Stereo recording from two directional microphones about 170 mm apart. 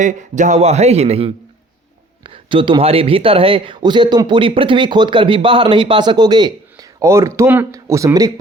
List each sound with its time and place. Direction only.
0.0 s a man's voice: 45° right (ahead or behind); by 8.3 s 20° right (ahead or behind)